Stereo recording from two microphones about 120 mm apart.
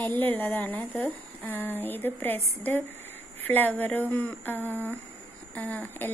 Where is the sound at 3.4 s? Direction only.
15° left (ahead or behind).